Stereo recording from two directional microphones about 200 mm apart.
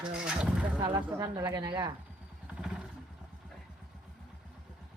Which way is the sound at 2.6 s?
Centre (ahead or behind).